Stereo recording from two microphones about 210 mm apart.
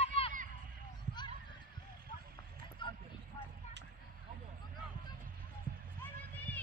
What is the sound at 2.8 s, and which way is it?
Vehicle, 25° left (ahead or behind).